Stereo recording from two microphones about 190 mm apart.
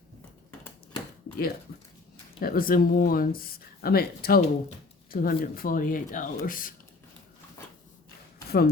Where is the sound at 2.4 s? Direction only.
50° left (ahead or behind).